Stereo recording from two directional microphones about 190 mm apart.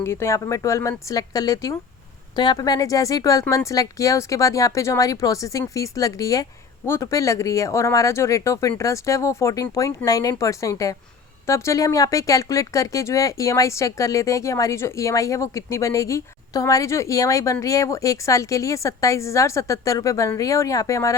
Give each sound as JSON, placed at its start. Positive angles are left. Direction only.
{"t": 0.0, "sound": "speech", "side_deg": 15}